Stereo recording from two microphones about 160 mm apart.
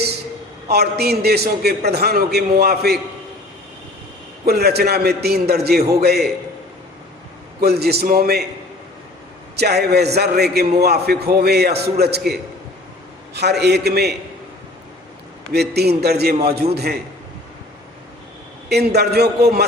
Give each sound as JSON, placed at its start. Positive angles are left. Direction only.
{"t": 0.7, "sound": "a man's voice", "side_deg": -85}
{"t": 4.4, "sound": "a man's voice", "side_deg": -80}
{"t": 7.6, "sound": "a man's voice", "side_deg": -85}
{"t": 9.6, "sound": "a man's voice", "side_deg": -90}
{"t": 13.3, "sound": "a man's voice", "side_deg": -90}
{"t": 15.5, "sound": "a man's voice", "side_deg": -90}
{"t": 18.7, "sound": "a man's voice", "side_deg": -90}